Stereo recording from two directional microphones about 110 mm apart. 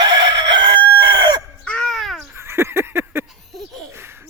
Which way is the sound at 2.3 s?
25° right (ahead or behind).